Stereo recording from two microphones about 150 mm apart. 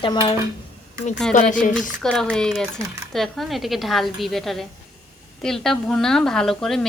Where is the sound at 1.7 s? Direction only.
5° left (ahead or behind).